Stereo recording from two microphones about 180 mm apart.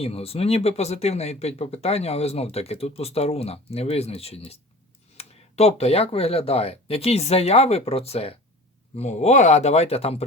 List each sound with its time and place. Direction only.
0.0 s speech: 35° left (ahead or behind)